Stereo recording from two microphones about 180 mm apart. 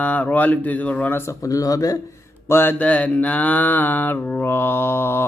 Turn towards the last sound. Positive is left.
turn(degrees=15)  # may be behind; listen again after turning